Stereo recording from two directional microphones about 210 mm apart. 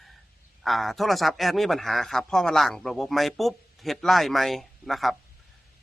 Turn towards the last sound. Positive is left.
turn(degrees=0)  # may be behind; listen again after turning